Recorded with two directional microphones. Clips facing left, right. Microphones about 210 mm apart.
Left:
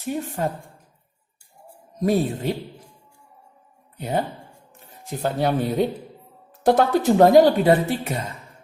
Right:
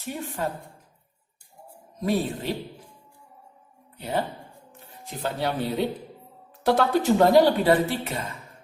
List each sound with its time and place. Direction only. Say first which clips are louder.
0.0 s speech: left 5 dB; 45° left (ahead or behind)
2.0 s speech: left 4 dB; 45° left (ahead or behind)
5.2 s speech: left 5 dB; 45° left (ahead or behind)